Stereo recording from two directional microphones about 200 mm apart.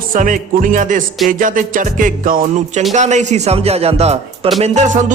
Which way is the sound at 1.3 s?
40° right (ahead or behind).